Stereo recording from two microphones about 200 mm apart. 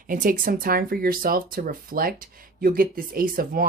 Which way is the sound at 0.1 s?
45° right (ahead or behind).